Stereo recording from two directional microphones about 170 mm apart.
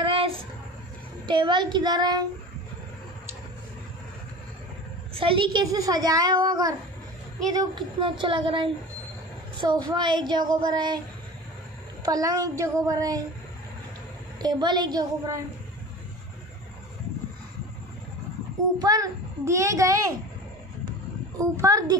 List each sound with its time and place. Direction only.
0.0 s a sound: 30° right (ahead or behind)
1.2 s a child's voice: 30° right (ahead or behind)
5.1 s a child's voice: 30° right (ahead or behind)
12.0 s a child's voice: 20° right (ahead or behind)
14.4 s a child's voice: 25° right (ahead or behind)
18.8 s a child's voice: 20° right (ahead or behind)
21.4 s a child's voice: 20° right (ahead or behind)